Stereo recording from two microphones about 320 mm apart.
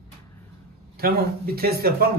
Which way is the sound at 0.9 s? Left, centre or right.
Right.